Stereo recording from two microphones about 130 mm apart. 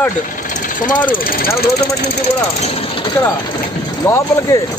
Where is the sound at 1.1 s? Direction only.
90° left.